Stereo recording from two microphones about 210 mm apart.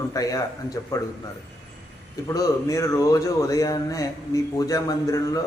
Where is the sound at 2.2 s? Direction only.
15° left (ahead or behind).